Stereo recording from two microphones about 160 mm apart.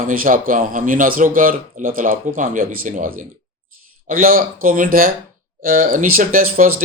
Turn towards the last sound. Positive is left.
turn(degrees=-60)  # may be behind; listen again after turning